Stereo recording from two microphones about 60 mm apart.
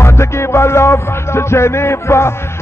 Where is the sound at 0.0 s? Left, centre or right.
Left.